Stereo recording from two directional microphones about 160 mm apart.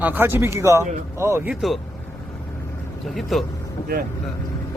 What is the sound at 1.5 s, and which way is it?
Speech, centre (ahead or behind).